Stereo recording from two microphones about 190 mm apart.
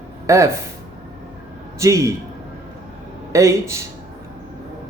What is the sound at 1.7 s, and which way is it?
Speech, 15° right (ahead or behind).